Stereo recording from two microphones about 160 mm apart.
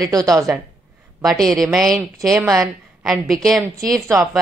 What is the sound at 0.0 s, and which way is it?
Speech, 25° right (ahead or behind).